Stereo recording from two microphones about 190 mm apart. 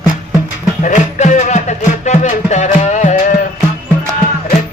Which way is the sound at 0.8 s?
40° left (ahead or behind).